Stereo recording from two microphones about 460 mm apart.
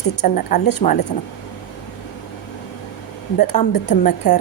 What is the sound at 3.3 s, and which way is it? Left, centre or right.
Speech, left.